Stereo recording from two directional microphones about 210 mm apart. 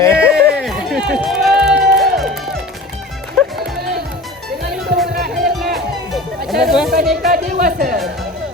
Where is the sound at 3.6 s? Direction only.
50° right (ahead or behind).